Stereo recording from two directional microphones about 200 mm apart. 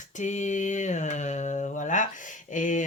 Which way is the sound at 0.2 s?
35° left (ahead or behind).